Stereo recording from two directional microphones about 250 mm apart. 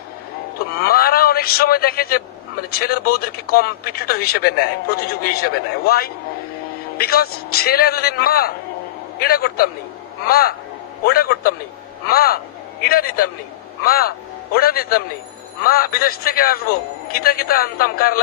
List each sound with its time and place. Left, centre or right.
0.8 s speech: left